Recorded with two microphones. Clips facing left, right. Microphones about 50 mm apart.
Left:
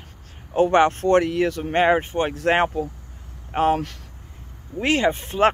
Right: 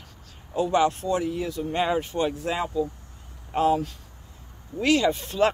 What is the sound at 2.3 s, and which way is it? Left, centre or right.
Speech, left.